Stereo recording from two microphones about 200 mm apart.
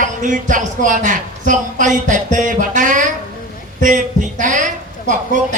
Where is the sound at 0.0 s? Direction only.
40° right (ahead or behind).